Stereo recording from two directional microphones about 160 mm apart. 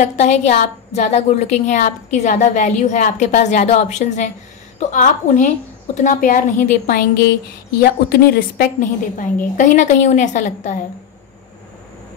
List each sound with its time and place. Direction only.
0.0 s a woman's voice: 45° left (ahead or behind)
7.8 s a woman's voice: 75° left (ahead or behind); by 10.8 s 50° left (ahead or behind)